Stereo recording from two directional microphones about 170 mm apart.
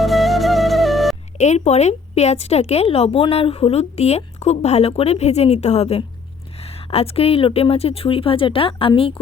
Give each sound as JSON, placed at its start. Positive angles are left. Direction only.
{"t": 0.0, "sound": "flute", "side_deg": 0}
{"t": 1.4, "sound": "a woman's voice", "side_deg": 40}